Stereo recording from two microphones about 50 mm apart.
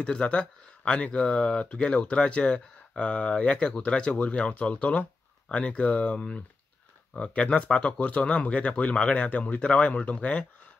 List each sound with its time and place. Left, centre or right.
0.0 s speech: left